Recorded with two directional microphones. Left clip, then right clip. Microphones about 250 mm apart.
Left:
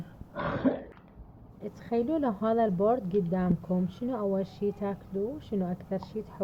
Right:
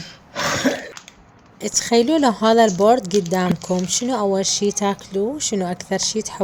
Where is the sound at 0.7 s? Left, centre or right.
Right.